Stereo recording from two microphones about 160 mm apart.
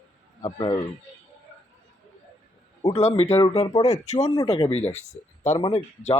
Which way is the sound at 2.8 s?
40° left (ahead or behind).